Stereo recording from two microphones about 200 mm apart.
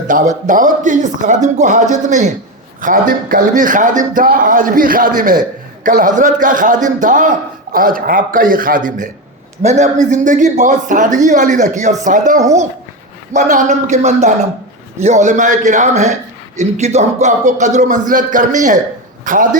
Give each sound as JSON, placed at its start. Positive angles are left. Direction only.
{"t": 0.1, "sound": "a man's voice", "side_deg": -40}